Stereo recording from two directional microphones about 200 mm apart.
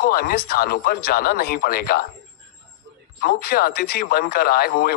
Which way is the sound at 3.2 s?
50° left (ahead or behind).